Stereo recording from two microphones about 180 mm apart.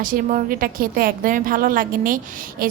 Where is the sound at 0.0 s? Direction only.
50° right (ahead or behind).